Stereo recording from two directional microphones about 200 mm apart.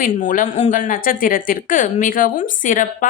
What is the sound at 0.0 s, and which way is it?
Speech, 40° left (ahead or behind).